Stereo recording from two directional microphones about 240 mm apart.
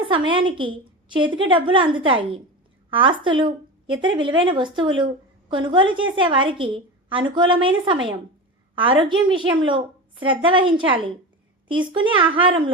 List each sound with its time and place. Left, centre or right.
0.3 s a woman's voice: right
8.7 s a woman's voice: right